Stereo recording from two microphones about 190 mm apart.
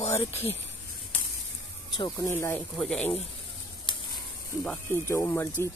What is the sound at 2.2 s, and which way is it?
Speech, 15° left (ahead or behind).